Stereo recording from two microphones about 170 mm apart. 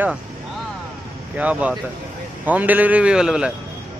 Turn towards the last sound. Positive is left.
turn(degrees=-5)  # may be behind; listen again after turning